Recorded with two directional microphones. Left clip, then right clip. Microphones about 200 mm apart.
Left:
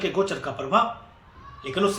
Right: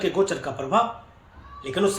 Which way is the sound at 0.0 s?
15° right (ahead or behind).